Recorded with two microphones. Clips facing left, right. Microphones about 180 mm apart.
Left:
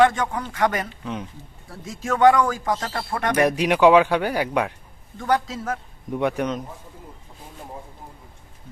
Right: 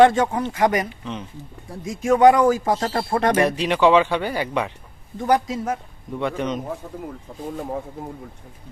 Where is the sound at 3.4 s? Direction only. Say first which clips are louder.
Left 1 dB; 10° left (ahead or behind).